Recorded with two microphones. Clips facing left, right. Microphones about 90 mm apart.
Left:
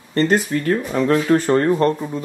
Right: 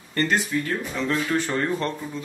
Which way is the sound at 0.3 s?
50° left (ahead or behind).